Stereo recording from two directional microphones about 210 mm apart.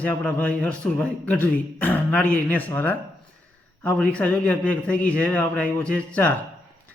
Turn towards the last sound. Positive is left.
turn(degrees=5)  # may be behind; listen again after turning